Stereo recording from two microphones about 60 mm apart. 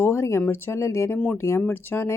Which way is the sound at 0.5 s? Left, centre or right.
Left.